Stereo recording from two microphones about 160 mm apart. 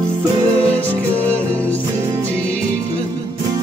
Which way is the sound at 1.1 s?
10° left (ahead or behind).